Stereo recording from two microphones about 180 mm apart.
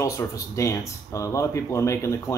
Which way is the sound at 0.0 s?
20° left (ahead or behind).